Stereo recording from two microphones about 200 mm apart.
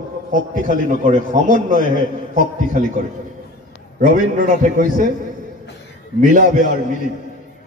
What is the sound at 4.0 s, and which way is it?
A man's voice, 40° right (ahead or behind).